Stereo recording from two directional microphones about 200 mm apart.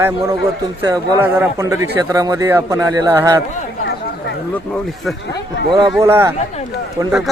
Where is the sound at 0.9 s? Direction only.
15° right (ahead or behind).